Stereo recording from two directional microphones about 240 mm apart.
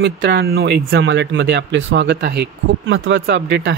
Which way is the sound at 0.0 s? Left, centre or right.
Right.